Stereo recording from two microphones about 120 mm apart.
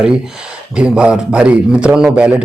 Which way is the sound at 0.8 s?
10° right (ahead or behind).